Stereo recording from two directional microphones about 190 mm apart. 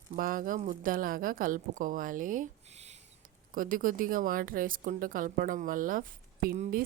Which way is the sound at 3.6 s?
45° right (ahead or behind).